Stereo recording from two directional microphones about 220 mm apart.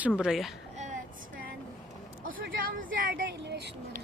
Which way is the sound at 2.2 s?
40° right (ahead or behind).